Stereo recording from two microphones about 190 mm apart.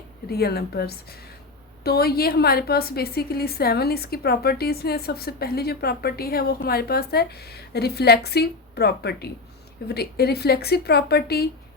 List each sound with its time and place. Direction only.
0.3 s a woman's voice: 55° left (ahead or behind)